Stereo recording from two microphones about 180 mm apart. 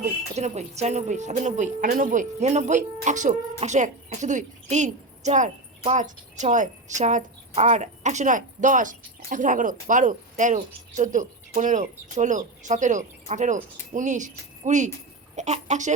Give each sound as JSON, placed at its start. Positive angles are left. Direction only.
{"t": 0.0, "sound": "music", "side_deg": -40}
{"t": 3.6, "sound": "a woman's voice", "side_deg": -40}
{"t": 15.4, "sound": "music", "side_deg": -40}